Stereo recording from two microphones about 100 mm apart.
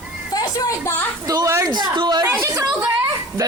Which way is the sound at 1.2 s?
35° right (ahead or behind).